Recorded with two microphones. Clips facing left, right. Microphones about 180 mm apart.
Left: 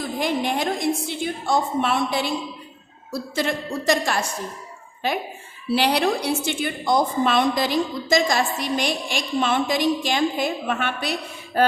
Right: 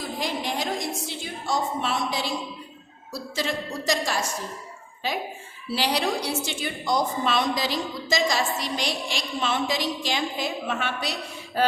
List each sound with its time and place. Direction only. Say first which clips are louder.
0.2 s a sound: left 6 dB; 55° left (ahead or behind)
3.1 s a woman's voice: left 4 dB; 55° left (ahead or behind)
5.7 s a woman's voice: left 5 dB; 60° left (ahead or behind)